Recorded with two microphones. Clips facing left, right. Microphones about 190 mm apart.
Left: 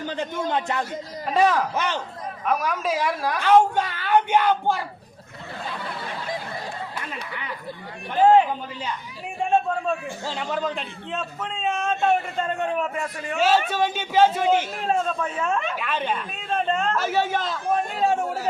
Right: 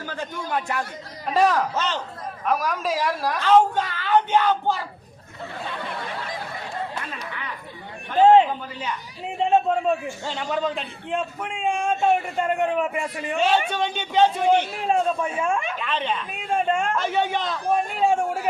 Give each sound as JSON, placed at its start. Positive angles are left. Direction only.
{"t": 0.0, "sound": "a man's voice", "side_deg": 20}
{"t": 1.3, "sound": "speech", "side_deg": 0}
{"t": 1.7, "sound": "speech", "side_deg": 10}
{"t": 2.5, "sound": "speech", "side_deg": 0}
{"t": 3.4, "sound": "speech", "side_deg": 10}
{"t": 8.2, "sound": "a sound", "side_deg": -25}
{"t": 9.4, "sound": "a man's voice", "side_deg": -20}
{"t": 10.2, "sound": "speech", "side_deg": 0}
{"t": 11.1, "sound": "a man's voice", "side_deg": -15}
{"t": 13.3, "sound": "speech", "side_deg": 5}
{"t": 14.8, "sound": "a man's voice", "side_deg": -10}
{"t": 15.8, "sound": "speech", "side_deg": 10}
{"t": 16.4, "sound": "a man's voice", "side_deg": -10}
{"t": 17.0, "sound": "speech", "side_deg": 5}